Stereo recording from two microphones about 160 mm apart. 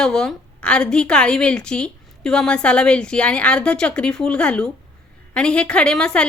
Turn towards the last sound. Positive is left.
turn(degrees=5)  # may be behind; listen again after turning